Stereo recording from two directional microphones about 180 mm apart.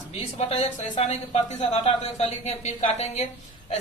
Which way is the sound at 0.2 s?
35° left (ahead or behind).